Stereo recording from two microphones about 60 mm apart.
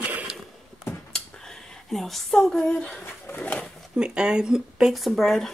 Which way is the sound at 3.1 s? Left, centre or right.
Left.